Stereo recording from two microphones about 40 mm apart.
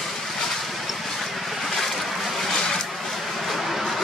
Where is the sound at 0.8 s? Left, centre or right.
Centre.